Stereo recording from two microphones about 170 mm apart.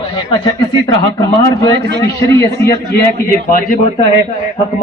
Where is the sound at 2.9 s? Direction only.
60° left (ahead or behind).